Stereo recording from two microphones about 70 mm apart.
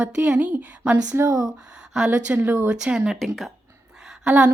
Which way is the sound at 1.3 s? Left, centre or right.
Right.